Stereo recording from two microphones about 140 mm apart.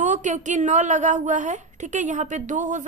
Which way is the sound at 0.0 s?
60° right (ahead or behind).